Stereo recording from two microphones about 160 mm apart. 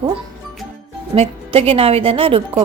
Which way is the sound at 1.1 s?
35° right (ahead or behind).